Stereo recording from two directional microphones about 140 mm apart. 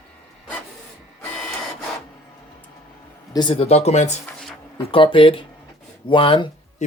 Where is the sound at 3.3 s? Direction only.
35° left (ahead or behind).